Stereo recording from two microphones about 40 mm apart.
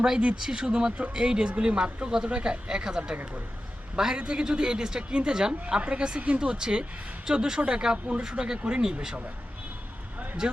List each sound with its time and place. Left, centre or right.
0.3 s a man's voice: centre
10.4 s a man's voice: right